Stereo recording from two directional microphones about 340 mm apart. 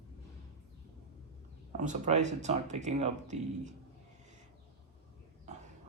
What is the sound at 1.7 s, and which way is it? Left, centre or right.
Speech, right.